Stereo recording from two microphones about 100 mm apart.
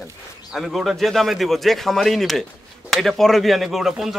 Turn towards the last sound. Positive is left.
turn(degrees=-5)  # may be behind; listen again after turning